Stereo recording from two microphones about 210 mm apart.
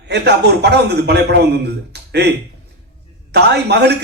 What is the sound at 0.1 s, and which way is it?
A man's voice, 55° right (ahead or behind).